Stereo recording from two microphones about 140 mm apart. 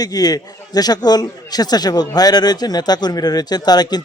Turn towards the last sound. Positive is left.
turn(degrees=30)  # may be behind; listen again after turning